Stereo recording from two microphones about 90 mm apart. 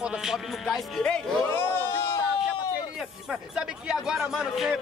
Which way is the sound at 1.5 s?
30° left (ahead or behind).